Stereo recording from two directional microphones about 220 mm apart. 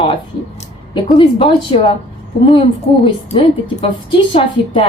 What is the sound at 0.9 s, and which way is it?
A woman's voice, 20° left (ahead or behind).